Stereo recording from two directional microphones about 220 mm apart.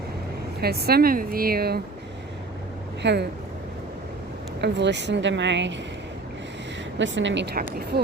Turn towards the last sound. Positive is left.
turn(degrees=-45)  # may be behind; listen again after turning